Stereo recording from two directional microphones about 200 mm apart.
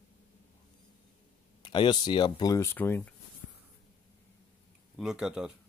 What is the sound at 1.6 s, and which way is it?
Speech, 25° left (ahead or behind).